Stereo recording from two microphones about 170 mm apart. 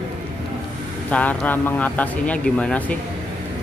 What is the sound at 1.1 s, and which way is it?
Speech, 10° left (ahead or behind).